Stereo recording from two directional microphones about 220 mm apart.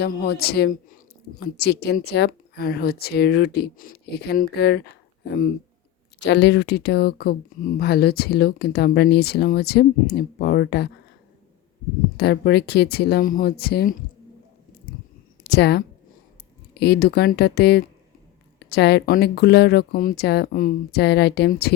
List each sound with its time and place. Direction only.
0.0 s speech: 40° left (ahead or behind)
12.1 s speech: 45° left (ahead or behind)
15.4 s a woman's voice: 50° left (ahead or behind)